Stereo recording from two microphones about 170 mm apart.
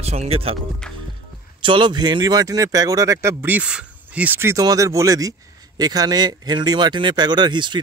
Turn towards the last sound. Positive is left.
turn(degrees=-25)  # may be behind; listen again after turning